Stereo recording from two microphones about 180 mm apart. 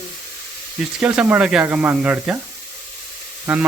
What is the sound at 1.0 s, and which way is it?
Speech, 5° right (ahead or behind).